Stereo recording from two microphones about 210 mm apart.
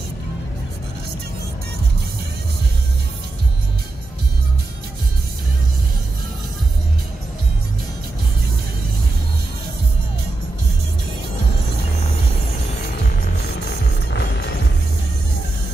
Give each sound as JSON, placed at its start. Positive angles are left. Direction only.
{"t": 13.2, "sound": "music", "side_deg": 50}